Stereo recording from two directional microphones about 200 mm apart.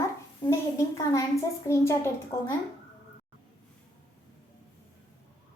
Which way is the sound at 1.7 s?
15° left (ahead or behind).